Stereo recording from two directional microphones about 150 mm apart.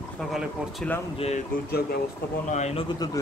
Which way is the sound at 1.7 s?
90° left.